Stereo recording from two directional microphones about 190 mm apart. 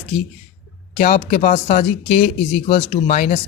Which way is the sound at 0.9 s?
40° left (ahead or behind).